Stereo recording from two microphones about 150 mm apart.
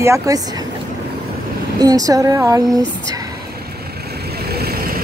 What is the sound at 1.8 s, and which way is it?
Speech, 25° right (ahead or behind).